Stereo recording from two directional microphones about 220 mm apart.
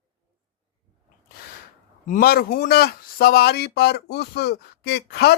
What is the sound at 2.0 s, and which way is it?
Speech, 40° left (ahead or behind).